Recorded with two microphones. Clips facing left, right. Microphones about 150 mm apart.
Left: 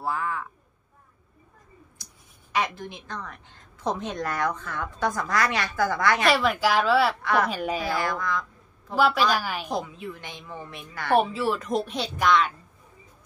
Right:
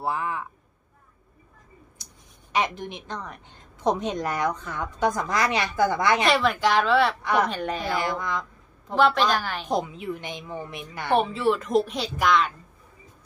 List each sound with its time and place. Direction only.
0.0 s a woman's voice: 20° right (ahead or behind)
2.5 s a woman's voice: 20° right (ahead or behind)
6.2 s speech: centre (ahead or behind)
7.9 s speech: 20° right (ahead or behind)
8.9 s a woman's voice: 5° left (ahead or behind)
9.7 s a woman's voice: 20° right (ahead or behind)
11.1 s speech: centre (ahead or behind)